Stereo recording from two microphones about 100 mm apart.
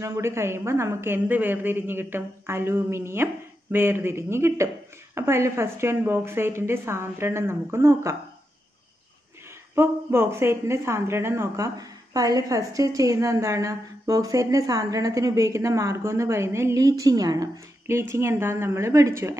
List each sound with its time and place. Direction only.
0.0 s a woman's voice: 25° right (ahead or behind)
9.8 s a woman's voice: 25° right (ahead or behind)
17.8 s a woman's voice: 25° right (ahead or behind)